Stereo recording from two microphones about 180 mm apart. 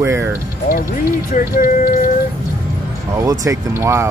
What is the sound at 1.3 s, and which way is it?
Speech, 50° left (ahead or behind).